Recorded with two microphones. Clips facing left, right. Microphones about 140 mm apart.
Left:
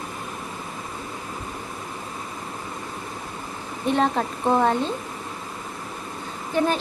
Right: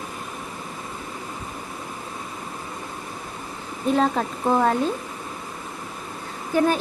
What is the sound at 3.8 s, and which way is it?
Speech, centre (ahead or behind).